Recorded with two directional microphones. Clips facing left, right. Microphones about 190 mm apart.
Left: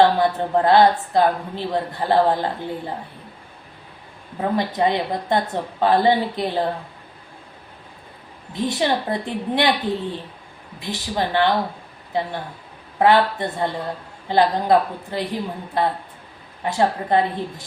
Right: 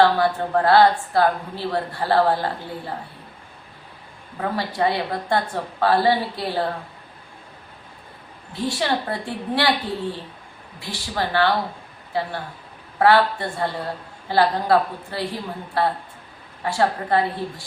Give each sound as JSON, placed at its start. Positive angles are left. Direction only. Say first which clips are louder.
{"t": 0.0, "sound": "a woman's voice", "louder": "left 1 dB", "side_deg": 20}
{"t": 4.4, "sound": "a woman's voice", "louder": "left 3 dB", "side_deg": 20}
{"t": 8.5, "sound": "a woman's voice", "louder": "left 2 dB", "side_deg": 20}